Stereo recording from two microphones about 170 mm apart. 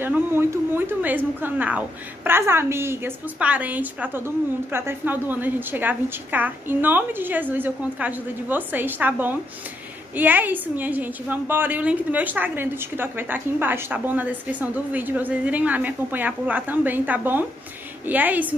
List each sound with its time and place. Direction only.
0.0 s a woman's voice: 15° right (ahead or behind)